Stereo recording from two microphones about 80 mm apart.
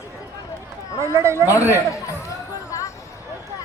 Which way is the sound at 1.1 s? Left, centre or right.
Right.